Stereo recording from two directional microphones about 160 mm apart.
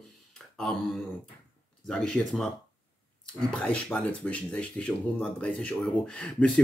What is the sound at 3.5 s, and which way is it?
Speech, 10° left (ahead or behind).